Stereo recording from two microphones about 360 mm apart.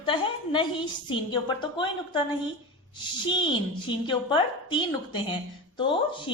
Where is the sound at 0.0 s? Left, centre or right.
Centre.